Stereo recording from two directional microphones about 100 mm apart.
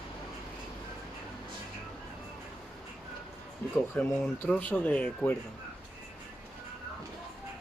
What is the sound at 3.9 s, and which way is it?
Speech, 15° left (ahead or behind).